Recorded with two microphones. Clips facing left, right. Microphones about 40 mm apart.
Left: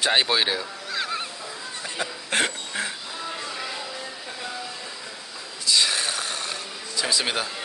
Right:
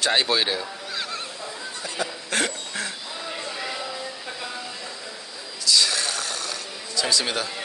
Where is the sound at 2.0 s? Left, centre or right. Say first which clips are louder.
Left 1 dB; left.